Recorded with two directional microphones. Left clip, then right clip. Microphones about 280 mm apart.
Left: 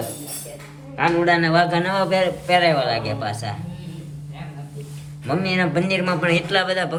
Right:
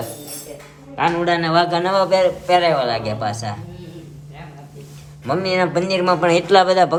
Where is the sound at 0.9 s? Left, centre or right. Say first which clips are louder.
Even; centre.